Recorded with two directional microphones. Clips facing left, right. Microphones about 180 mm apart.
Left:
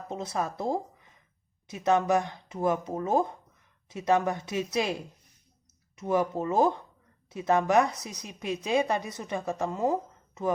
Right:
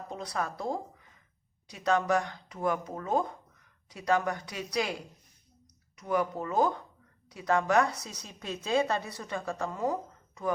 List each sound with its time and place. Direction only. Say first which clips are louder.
0.1 s a woman's voice: left 3 dB; 25° left (ahead or behind)
6.0 s a woman's voice: left 3 dB; 25° left (ahead or behind)